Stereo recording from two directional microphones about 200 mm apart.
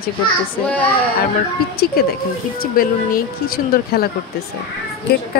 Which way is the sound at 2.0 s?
50° left (ahead or behind).